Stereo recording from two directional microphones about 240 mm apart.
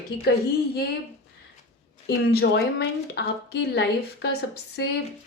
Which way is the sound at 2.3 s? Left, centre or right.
Left.